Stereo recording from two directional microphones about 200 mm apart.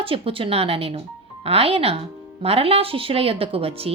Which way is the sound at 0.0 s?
25° right (ahead or behind).